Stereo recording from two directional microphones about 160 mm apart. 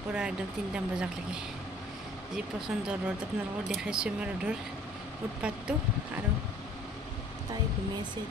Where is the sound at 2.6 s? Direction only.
5° right (ahead or behind).